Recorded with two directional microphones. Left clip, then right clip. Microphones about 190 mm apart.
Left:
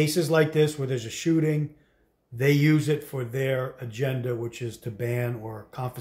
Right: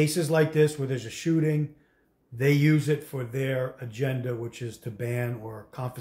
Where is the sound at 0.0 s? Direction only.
20° left (ahead or behind).